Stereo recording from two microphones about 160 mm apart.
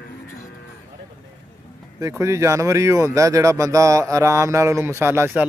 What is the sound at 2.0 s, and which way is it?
Speech, 20° right (ahead or behind).